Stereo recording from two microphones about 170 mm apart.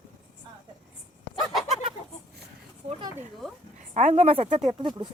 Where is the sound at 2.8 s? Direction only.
40° right (ahead or behind).